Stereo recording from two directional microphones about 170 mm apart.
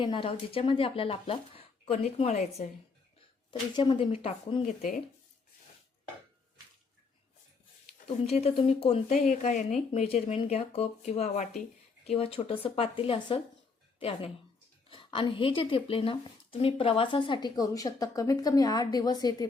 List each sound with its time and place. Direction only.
0.0 s speech: 30° left (ahead or behind); by 2.7 s 45° left (ahead or behind)
3.5 s speech: 30° left (ahead or behind)
4.6 s speech: 50° left (ahead or behind)
8.0 s speech: 35° left (ahead or behind)